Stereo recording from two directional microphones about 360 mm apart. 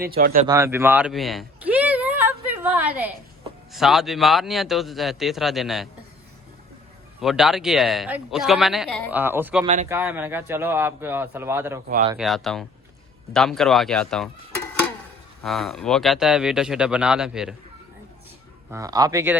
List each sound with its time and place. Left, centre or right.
0.0 s speech: right
0.4 s a sound: centre
3.7 s speech: centre
7.2 s speech: centre
11.9 s speech: right
12.1 s speech: centre
15.4 s speech: centre
18.7 s speech: centre